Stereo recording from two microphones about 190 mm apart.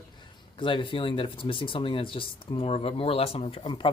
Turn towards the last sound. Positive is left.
turn(degrees=25)  # may be behind; listen again after turning